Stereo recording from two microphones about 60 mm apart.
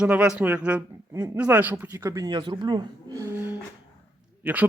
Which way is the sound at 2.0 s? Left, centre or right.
Right.